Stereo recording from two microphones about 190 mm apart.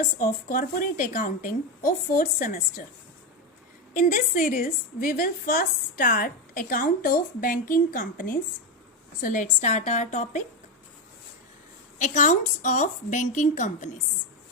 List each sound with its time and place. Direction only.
0.0 s a woman's voice: 45° left (ahead or behind)
3.9 s a woman's voice: 45° left (ahead or behind)
11.9 s a woman's voice: 40° left (ahead or behind)